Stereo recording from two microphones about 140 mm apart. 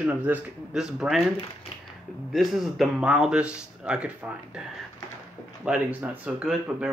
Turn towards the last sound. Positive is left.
turn(degrees=-5)  # may be behind; listen again after turning